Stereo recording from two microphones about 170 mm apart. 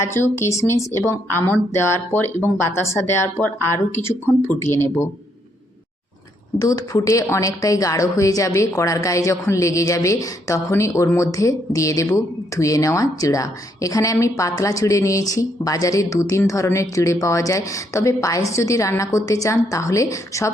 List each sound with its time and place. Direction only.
0.0 s speech: 15° left (ahead or behind)
6.6 s a woman's voice: 20° left (ahead or behind)